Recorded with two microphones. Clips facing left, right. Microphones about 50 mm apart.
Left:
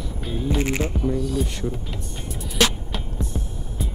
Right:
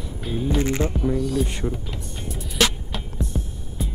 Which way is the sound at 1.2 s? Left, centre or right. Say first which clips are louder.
Right 1 dB; centre.